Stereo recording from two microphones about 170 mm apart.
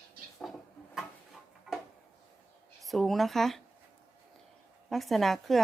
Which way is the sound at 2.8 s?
Centre (ahead or behind).